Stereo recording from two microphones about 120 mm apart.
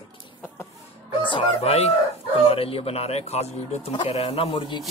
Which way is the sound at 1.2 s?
45° left (ahead or behind).